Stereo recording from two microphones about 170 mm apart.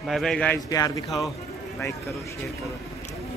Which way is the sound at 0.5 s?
20° left (ahead or behind).